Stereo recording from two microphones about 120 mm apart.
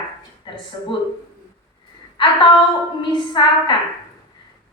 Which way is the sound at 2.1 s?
45° left (ahead or behind).